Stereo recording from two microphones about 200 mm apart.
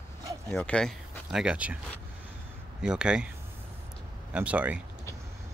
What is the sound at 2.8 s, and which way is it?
Speech, 5° right (ahead or behind).